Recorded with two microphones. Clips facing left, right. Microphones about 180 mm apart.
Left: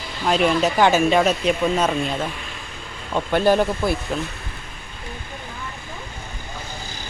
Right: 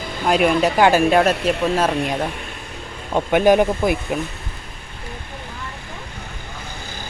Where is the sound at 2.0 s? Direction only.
15° right (ahead or behind).